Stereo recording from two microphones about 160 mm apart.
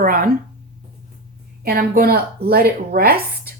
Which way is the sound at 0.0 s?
60° right (ahead or behind).